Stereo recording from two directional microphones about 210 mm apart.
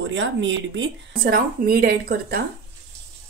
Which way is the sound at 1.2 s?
45° right (ahead or behind).